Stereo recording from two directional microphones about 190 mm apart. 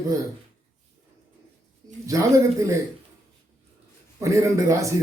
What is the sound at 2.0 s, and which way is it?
Speech, 15° right (ahead or behind).